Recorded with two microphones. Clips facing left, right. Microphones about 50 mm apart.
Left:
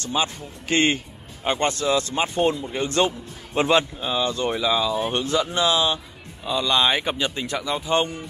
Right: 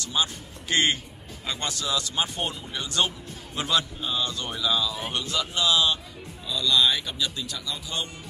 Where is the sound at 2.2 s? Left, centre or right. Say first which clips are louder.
Left 10 dB; left.